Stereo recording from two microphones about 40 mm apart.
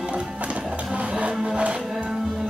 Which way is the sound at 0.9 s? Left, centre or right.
Right.